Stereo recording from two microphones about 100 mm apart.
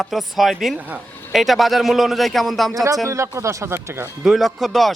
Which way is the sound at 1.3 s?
Centre (ahead or behind).